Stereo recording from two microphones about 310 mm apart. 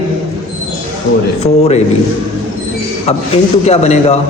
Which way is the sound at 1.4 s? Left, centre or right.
Left.